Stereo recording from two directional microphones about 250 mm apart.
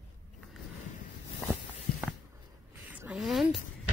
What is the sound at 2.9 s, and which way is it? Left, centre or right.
Speech, centre.